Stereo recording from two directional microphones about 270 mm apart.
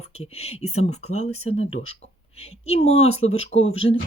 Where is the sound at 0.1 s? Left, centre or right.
Left.